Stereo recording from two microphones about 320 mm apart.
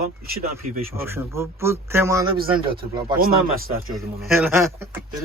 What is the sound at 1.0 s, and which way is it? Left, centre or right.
Speech, centre.